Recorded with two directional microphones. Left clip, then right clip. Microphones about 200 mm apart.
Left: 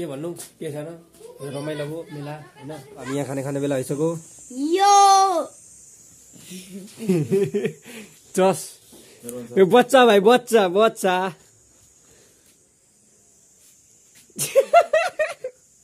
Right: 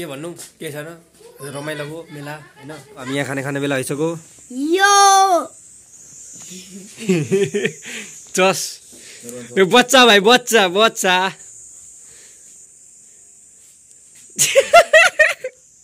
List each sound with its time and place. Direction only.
0.0 s a man's voice: 10° left (ahead or behind)
4.6 s a child's voice: 25° right (ahead or behind)
7.0 s a man's voice: centre (ahead or behind)
8.3 s speech: 15° left (ahead or behind)
14.3 s a sound: 5° left (ahead or behind)